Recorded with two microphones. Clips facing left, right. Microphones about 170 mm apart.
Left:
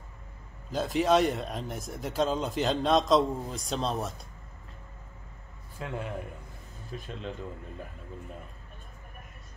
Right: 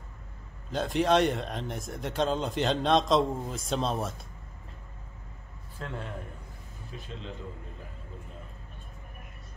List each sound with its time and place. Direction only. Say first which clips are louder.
0.7 s speech: even; centre (ahead or behind)
5.8 s a man's voice: left 2 dB; 10° left (ahead or behind)
6.9 s speech: left 4 dB; 45° left (ahead or behind)